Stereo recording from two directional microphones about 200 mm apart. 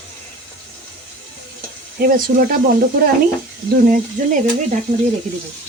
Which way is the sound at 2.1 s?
45° right (ahead or behind).